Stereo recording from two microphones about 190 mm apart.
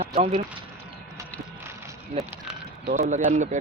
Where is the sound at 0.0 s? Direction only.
35° right (ahead or behind).